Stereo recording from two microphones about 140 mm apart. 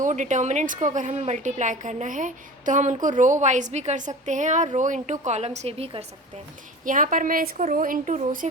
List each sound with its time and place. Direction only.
0.0 s a woman's voice: 60° right (ahead or behind); by 6.1 s 45° right (ahead or behind)
6.8 s speech: 70° right (ahead or behind)
7.5 s speech: 60° right (ahead or behind)